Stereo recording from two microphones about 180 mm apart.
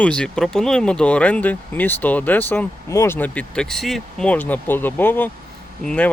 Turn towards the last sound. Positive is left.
turn(degrees=5)  # may be behind; listen again after turning